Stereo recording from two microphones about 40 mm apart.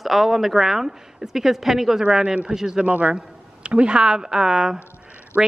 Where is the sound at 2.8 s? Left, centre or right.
Right.